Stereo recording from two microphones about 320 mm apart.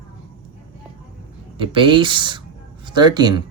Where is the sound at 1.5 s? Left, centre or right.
Centre.